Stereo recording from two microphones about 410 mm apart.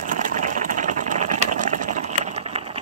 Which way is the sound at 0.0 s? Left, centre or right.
Centre.